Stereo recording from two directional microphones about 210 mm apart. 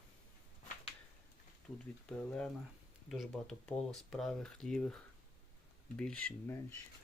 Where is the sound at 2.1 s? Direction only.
5° left (ahead or behind).